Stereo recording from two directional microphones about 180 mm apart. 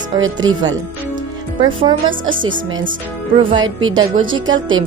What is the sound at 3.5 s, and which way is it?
Speech, 25° right (ahead or behind).